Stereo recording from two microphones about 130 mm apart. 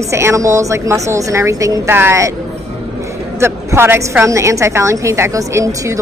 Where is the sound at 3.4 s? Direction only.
20° right (ahead or behind).